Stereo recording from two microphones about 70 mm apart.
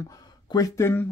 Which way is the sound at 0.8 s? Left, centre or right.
Left.